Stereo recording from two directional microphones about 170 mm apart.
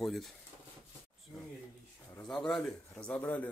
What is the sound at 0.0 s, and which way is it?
Speech, centre (ahead or behind).